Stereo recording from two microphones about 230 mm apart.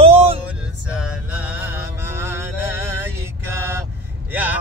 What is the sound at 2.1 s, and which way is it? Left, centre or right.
Music, centre.